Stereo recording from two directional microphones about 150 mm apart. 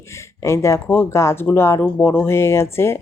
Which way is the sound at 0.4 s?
20° left (ahead or behind).